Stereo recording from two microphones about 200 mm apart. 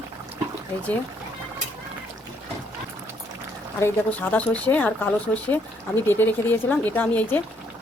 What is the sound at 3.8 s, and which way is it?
Speech, 10° left (ahead or behind).